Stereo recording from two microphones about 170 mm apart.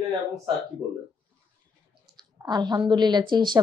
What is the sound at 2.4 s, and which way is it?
A woman's voice, 25° right (ahead or behind).